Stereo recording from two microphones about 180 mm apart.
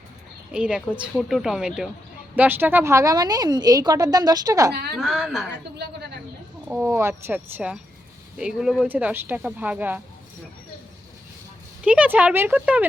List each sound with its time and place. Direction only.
0.5 s a woman's voice: 5° right (ahead or behind)
4.7 s a woman's voice: 65° right (ahead or behind)
4.9 s speech: centre (ahead or behind)
6.8 s speech: 15° right (ahead or behind)
11.9 s speech: 10° right (ahead or behind)